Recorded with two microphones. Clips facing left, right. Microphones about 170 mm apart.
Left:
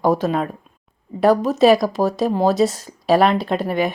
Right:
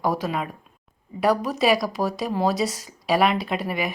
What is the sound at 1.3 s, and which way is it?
Speech, 25° left (ahead or behind).